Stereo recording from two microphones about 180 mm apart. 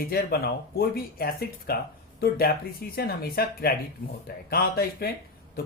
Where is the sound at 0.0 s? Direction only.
60° left (ahead or behind).